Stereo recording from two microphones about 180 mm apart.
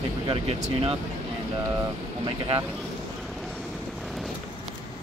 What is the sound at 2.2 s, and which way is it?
Speech, 25° right (ahead or behind).